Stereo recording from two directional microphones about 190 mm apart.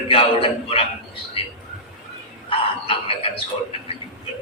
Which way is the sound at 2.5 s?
30° left (ahead or behind).